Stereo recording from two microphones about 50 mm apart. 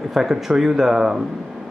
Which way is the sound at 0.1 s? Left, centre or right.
Centre.